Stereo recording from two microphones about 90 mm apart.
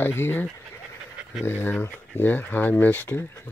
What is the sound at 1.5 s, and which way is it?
Speech, 25° left (ahead or behind).